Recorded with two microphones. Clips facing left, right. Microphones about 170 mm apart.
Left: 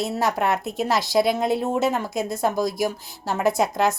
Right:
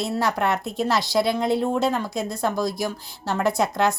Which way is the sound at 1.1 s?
15° left (ahead or behind).